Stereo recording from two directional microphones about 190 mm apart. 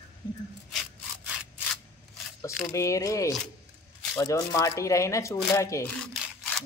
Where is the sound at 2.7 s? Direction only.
15° left (ahead or behind).